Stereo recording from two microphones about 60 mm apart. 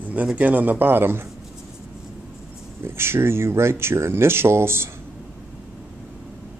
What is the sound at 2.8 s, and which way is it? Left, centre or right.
Speech, right.